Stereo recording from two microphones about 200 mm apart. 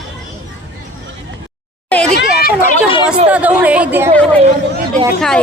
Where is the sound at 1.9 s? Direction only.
5° left (ahead or behind).